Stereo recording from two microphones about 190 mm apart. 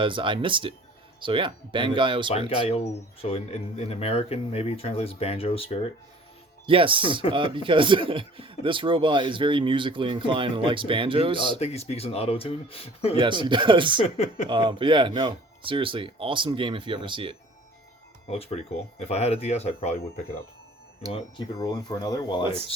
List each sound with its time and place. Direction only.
0.0 s speech: 25° right (ahead or behind)
2.6 s speech: 30° left (ahead or behind)
6.7 s speech: 25° right (ahead or behind)
11.6 s speech: 35° left (ahead or behind)
13.1 s speech: 25° right (ahead or behind)
14.0 s speech: 35° left (ahead or behind)
14.5 s speech: 25° right (ahead or behind)
18.3 s speech: 30° left (ahead or behind)
21.1 s speech: 30° left (ahead or behind)